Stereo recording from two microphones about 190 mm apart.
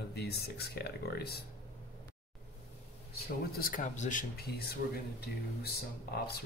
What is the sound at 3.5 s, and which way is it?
Speech, 45° left (ahead or behind).